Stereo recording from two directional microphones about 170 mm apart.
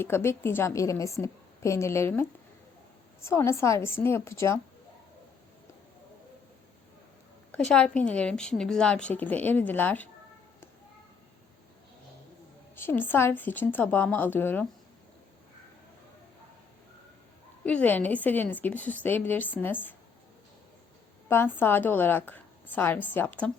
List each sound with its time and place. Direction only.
0.0 s a woman's voice: 15° left (ahead or behind)
3.2 s a woman's voice: 15° left (ahead or behind)
7.5 s a woman's voice: 5° left (ahead or behind)
12.7 s a woman's voice: 10° left (ahead or behind)
17.6 s a woman's voice: 10° left (ahead or behind)
21.2 s a woman's voice: 15° left (ahead or behind)